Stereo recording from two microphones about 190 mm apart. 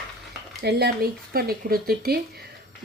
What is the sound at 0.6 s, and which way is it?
Speech, 55° right (ahead or behind).